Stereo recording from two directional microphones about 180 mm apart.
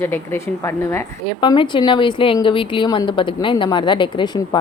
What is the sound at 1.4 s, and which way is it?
Speech, 25° left (ahead or behind).